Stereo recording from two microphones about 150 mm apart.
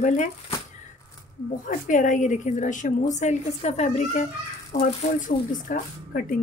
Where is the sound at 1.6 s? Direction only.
60° left (ahead or behind).